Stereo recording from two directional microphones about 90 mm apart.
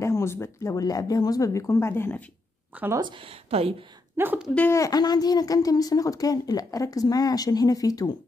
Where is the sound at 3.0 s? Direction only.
75° right (ahead or behind).